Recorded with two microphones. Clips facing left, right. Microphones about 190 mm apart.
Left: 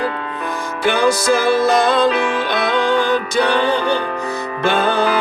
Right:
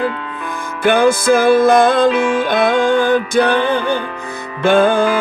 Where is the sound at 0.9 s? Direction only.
55° right (ahead or behind).